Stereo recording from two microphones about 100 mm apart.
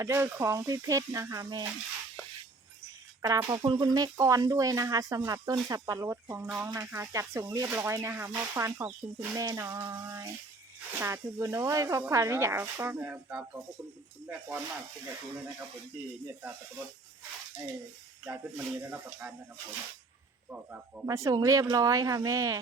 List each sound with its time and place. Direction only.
0.0 s speech: 25° right (ahead or behind)
3.2 s speech: 35° right (ahead or behind)
6.4 s speech: 20° right (ahead or behind)
9.3 s speech: 35° right (ahead or behind); by 14.6 s 20° right (ahead or behind)
18.3 s speech: 20° right (ahead or behind)
20.5 s speech: 15° right (ahead or behind)
21.1 s speech: 40° right (ahead or behind)